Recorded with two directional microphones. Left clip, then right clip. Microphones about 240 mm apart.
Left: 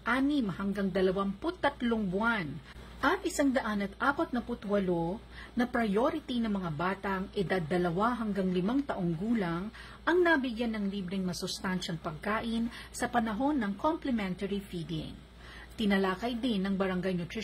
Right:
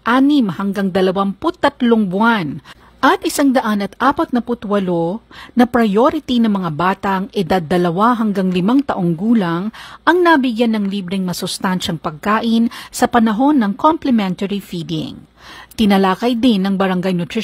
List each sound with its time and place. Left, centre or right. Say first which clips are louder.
0.0 s a woman's voice: right 16 dB; right